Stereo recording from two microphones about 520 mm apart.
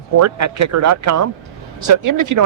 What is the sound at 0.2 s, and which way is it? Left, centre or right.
Speech, right.